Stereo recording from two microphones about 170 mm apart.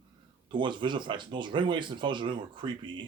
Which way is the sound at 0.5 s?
30° right (ahead or behind).